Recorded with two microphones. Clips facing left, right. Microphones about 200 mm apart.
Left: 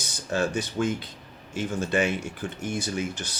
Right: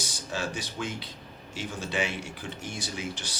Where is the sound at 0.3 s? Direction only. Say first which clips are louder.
Left 8 dB; 55° left (ahead or behind).